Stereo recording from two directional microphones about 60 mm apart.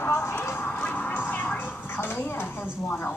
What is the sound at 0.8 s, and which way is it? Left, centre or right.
Music, left.